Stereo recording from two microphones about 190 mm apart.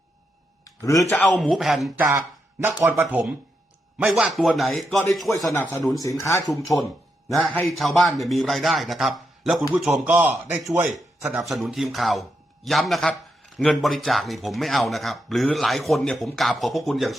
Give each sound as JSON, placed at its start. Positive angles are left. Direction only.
{"t": 0.6, "sound": "a sound", "side_deg": 15}
{"t": 1.2, "sound": "speech", "side_deg": 0}
{"t": 5.5, "sound": "speech", "side_deg": 15}
{"t": 7.3, "sound": "speech", "side_deg": 0}